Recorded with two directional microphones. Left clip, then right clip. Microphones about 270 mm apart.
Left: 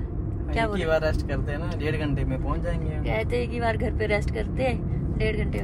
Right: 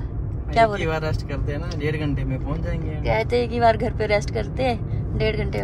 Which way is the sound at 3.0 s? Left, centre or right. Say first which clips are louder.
Right 7 dB; centre.